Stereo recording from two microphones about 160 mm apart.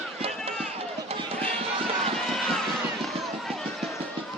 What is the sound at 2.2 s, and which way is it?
Run, centre (ahead or behind).